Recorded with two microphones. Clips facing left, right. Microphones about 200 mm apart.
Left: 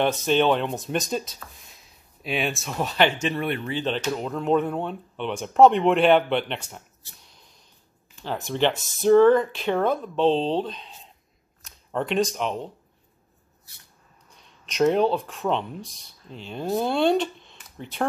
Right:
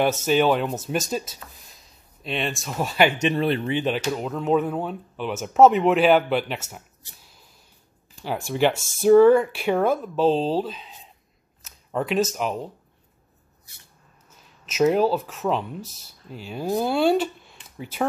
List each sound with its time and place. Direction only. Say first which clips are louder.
0.0 s speech: right 1 dB; 5° right (ahead or behind)
3.2 s speech: right 4 dB; 25° right (ahead or behind)
3.7 s speech: right 2 dB; 10° right (ahead or behind)
7.2 s a sound: right 1 dB; 5° right (ahead or behind)
8.2 s speech: right 2 dB; 10° right (ahead or behind)
14.3 s speech: right 1 dB; 5° right (ahead or behind)